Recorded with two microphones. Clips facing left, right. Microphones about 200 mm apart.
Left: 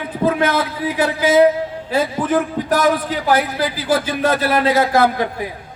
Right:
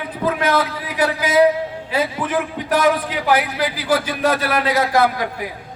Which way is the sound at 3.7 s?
25° left (ahead or behind).